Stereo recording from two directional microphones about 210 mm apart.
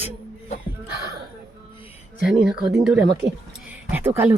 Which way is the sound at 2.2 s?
5° right (ahead or behind).